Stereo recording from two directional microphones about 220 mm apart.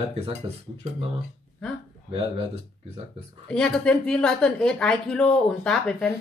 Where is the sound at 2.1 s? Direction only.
25° right (ahead or behind).